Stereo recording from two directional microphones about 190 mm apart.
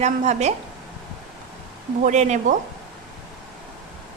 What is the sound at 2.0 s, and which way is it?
Speech, 40° right (ahead or behind).